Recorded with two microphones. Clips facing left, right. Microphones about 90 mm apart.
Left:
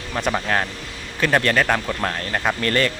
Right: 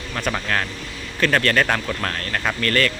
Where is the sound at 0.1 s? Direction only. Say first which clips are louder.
Left 2 dB; 15° left (ahead or behind).